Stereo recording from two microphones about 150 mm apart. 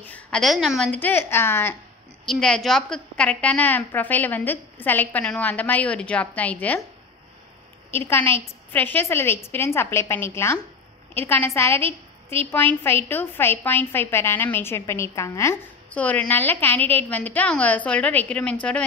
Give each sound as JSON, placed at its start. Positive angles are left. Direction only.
{"t": 0.0, "sound": "a woman's voice", "side_deg": 5}
{"t": 0.9, "sound": "a woman's voice", "side_deg": 15}
{"t": 2.2, "sound": "a woman's voice", "side_deg": 5}
{"t": 7.9, "sound": "a woman's voice", "side_deg": 15}
{"t": 11.8, "sound": "a woman's voice", "side_deg": -40}
{"t": 12.4, "sound": "a woman's voice", "side_deg": 15}